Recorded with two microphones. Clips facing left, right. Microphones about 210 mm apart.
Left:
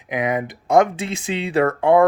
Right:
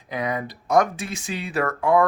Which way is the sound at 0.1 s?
20° left (ahead or behind).